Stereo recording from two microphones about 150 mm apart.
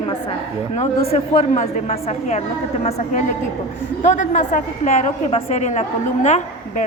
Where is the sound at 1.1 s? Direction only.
45° left (ahead or behind).